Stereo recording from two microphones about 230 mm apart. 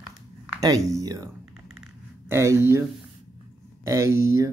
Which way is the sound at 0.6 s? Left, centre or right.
Centre.